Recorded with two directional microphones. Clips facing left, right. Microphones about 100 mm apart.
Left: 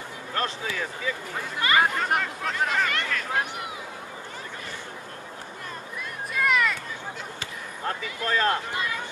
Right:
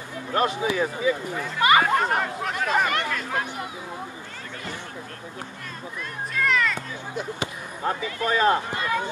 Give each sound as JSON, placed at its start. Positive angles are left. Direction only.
{"t": 0.3, "sound": "speech", "side_deg": -15}
{"t": 6.3, "sound": "a sound", "side_deg": 10}
{"t": 7.2, "sound": "speech", "side_deg": -15}